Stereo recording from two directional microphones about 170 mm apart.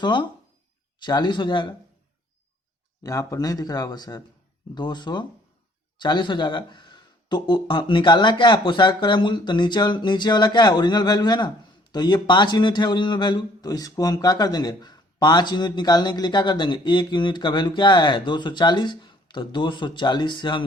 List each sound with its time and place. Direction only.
0.0 s speech: 25° left (ahead or behind)
3.0 s speech: 20° left (ahead or behind)